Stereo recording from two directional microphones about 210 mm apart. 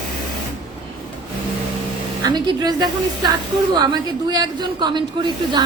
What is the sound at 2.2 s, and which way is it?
A woman's voice, 20° right (ahead or behind).